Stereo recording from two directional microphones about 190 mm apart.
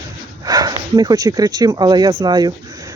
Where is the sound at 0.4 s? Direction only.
20° right (ahead or behind).